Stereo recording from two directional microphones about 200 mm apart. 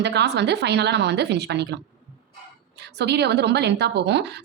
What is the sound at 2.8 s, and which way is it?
Speech, 55° right (ahead or behind).